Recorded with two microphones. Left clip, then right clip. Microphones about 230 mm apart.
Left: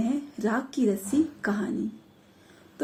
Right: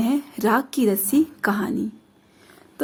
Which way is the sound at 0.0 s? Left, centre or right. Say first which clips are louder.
Right 7 dB; right.